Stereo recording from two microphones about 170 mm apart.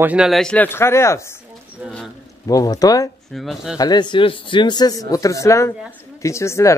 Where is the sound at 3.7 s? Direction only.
25° left (ahead or behind).